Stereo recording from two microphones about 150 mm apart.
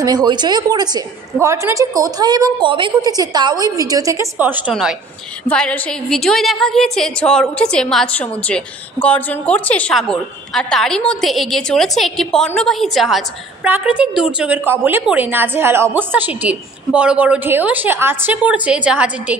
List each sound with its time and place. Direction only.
0.0 s a woman's voice: 25° right (ahead or behind)
5.5 s a woman's voice: 5° left (ahead or behind); by 19.3 s 10° right (ahead or behind)